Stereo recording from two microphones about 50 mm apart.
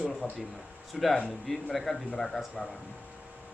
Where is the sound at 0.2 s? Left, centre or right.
Left.